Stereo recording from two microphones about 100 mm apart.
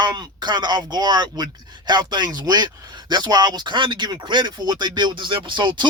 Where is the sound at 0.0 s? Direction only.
45° right (ahead or behind).